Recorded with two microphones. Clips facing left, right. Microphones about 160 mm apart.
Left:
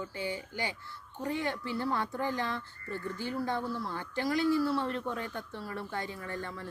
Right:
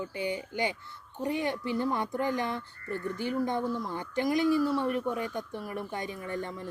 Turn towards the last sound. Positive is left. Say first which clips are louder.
# right 4 dB
turn(degrees=-20)  # may be behind; listen again after turning